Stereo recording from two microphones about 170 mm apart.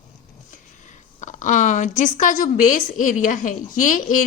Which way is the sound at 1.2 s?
45° left (ahead or behind).